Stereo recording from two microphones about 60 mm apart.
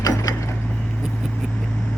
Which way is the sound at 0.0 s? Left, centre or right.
Left.